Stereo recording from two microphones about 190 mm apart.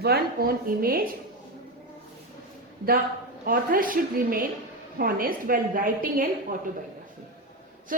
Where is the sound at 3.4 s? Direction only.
50° right (ahead or behind).